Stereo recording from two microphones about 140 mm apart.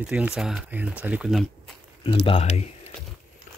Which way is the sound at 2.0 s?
40° left (ahead or behind).